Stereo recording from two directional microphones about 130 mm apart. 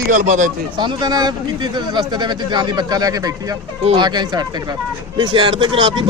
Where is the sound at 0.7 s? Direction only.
35° right (ahead or behind).